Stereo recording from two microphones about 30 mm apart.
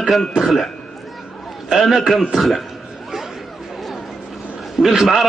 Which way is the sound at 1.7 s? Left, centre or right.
Right.